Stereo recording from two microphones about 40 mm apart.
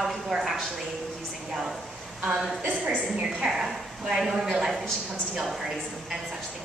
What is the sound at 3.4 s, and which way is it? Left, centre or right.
A woman's voice, centre.